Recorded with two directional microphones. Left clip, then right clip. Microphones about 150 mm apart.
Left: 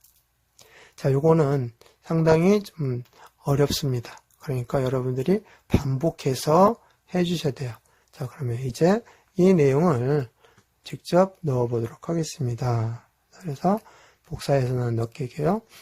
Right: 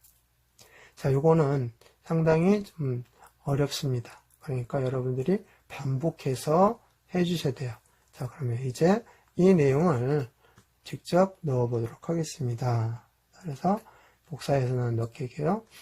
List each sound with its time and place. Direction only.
0.6 s speech: 30° left (ahead or behind)